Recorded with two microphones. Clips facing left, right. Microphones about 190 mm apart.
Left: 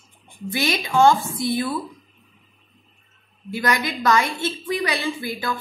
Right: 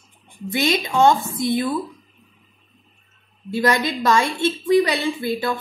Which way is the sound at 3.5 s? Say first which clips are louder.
Right 4 dB; 25° right (ahead or behind).